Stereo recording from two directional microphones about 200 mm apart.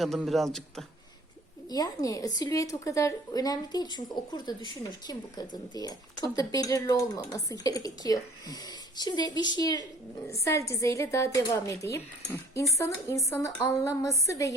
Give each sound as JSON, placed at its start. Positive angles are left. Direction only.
{"t": 0.0, "sound": "a man's voice", "side_deg": 0}
{"t": 1.7, "sound": "a woman's voice", "side_deg": 15}